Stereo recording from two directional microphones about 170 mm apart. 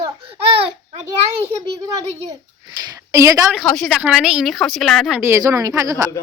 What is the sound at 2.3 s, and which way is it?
A child's voice, 20° right (ahead or behind).